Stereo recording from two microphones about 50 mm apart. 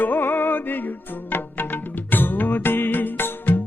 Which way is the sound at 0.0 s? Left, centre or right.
Left.